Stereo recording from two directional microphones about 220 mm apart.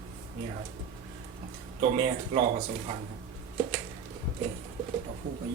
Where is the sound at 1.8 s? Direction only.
25° right (ahead or behind).